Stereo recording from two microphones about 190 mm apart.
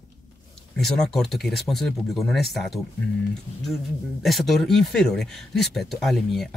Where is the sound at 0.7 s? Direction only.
Centre (ahead or behind).